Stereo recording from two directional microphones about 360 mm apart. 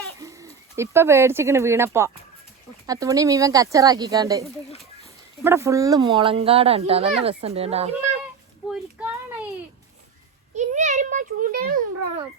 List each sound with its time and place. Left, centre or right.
0.2 s speech: centre
8.6 s child singing: centre
10.5 s a sound: centre